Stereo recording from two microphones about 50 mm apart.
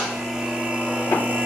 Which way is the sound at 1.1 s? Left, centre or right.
Right.